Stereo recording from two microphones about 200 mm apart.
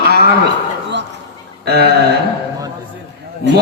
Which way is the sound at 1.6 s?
55° right (ahead or behind).